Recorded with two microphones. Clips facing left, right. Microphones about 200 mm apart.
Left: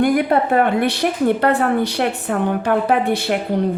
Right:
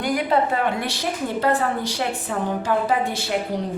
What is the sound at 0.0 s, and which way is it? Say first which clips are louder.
A woman's voice: left 5 dB; 55° left (ahead or behind).